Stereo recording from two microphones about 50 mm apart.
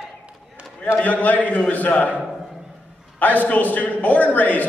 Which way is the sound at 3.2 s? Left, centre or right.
Left.